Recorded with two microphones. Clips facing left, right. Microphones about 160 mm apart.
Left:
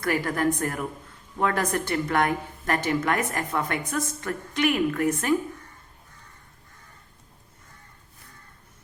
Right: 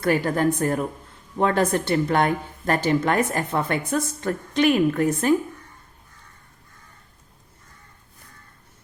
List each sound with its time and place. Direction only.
0.0 s a woman's voice: 25° right (ahead or behind)